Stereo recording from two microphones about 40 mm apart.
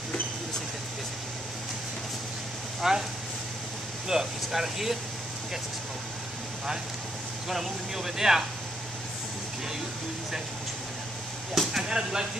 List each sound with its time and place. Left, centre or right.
2.8 s speech: centre
4.1 s speech: centre
7.4 s speech: centre
11.6 s a sound: centre
11.9 s speech: centre